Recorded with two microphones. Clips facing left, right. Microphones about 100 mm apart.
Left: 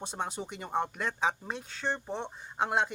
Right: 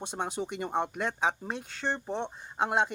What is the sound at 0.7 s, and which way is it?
Speech, 10° right (ahead or behind).